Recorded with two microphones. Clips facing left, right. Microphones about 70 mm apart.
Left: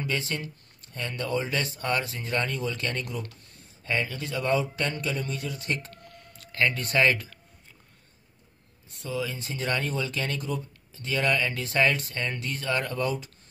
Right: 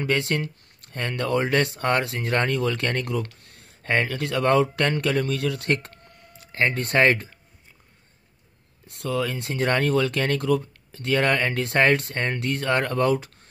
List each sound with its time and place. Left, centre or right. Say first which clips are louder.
0.0 s speech: right 7 dB; right
6.0 s a sound: left 1 dB; right
6.6 s speech: right 4 dB; right
8.8 s speech: right 6 dB; right